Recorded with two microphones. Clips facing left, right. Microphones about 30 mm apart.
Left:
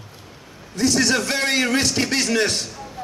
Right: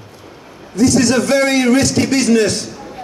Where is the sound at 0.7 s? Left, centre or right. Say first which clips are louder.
Right 6 dB; left.